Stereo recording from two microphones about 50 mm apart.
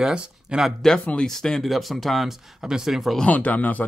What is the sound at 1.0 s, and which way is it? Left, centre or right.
Speech, left.